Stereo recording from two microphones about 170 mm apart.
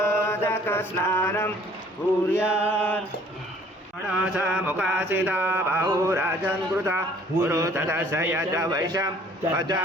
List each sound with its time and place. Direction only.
0.0 s mantra: 15° left (ahead or behind)
2.4 s mantra: 10° right (ahead or behind)
2.6 s music: 10° left (ahead or behind)
4.2 s mantra: 5° right (ahead or behind); by 9.0 s 20° right (ahead or behind)
9.6 s speech: 25° right (ahead or behind)